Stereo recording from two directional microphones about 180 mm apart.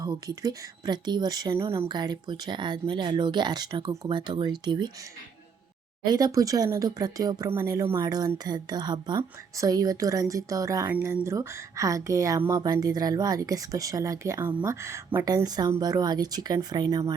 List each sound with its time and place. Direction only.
0.0 s speech: 20° right (ahead or behind)
6.1 s speech: 20° right (ahead or behind)